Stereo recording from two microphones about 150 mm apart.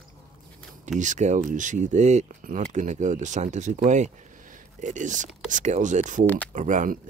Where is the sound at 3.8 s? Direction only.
55° right (ahead or behind).